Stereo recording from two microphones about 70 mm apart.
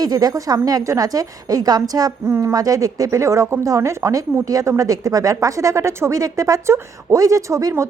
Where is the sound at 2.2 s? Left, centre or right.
Right.